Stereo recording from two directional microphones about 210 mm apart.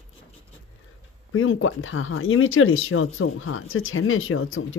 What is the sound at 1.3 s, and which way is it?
Speech, 75° left (ahead or behind).